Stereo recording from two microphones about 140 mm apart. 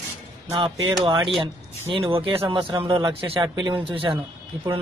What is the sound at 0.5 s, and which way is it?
Speech, 35° right (ahead or behind).